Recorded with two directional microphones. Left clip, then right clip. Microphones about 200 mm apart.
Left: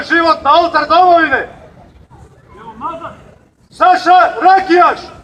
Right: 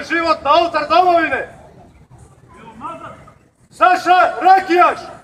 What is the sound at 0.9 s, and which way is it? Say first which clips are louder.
Speech: left 4 dB; 50° right (ahead or behind).